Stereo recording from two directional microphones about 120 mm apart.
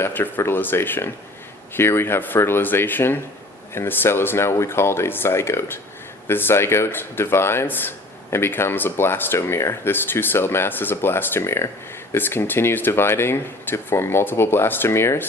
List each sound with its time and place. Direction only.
0.0 s speech: 15° left (ahead or behind)